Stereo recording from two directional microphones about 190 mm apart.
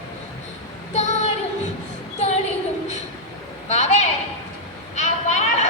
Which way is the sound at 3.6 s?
35° left (ahead or behind).